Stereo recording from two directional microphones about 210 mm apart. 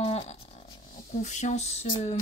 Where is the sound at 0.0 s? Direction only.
30° left (ahead or behind).